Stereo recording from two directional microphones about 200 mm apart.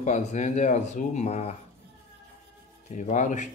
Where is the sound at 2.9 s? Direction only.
35° left (ahead or behind).